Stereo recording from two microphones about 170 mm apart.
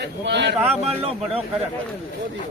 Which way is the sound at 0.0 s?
85° right.